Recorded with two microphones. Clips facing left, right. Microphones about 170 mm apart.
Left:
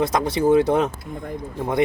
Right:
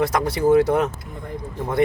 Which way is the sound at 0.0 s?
20° left (ahead or behind).